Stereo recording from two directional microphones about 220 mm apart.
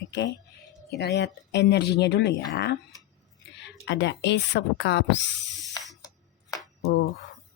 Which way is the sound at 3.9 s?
55° left (ahead or behind).